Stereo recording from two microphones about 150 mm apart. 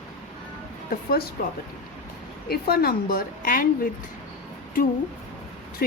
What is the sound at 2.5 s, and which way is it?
A woman's voice, 90° left.